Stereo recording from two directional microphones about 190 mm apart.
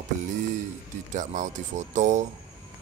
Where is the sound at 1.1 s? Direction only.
40° right (ahead or behind).